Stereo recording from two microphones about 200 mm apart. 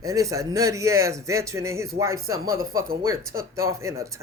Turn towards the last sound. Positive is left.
turn(degrees=-15)  # may be behind; listen again after turning